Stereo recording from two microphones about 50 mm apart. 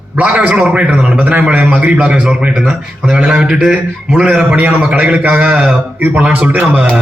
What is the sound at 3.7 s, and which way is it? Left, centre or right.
A man's voice, right.